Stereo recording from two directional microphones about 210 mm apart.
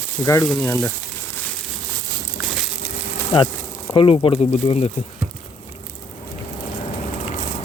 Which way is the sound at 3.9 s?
25° left (ahead or behind).